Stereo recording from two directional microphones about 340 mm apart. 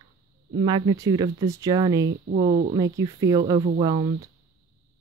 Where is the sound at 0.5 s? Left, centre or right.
Centre.